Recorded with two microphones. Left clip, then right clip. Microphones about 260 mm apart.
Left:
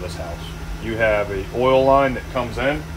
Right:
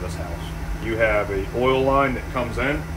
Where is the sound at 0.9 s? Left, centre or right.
Left.